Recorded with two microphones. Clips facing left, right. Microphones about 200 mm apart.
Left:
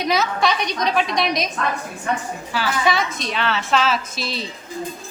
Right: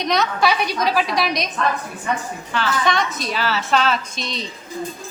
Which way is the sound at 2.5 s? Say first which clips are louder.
Even; 5° left (ahead or behind).